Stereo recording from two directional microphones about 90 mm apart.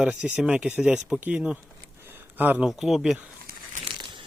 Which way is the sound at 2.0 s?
20° right (ahead or behind).